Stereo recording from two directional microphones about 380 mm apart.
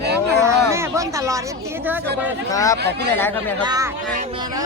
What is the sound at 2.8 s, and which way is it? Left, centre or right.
Speech, right.